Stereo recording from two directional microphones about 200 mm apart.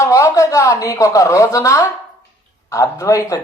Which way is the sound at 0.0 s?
15° left (ahead or behind).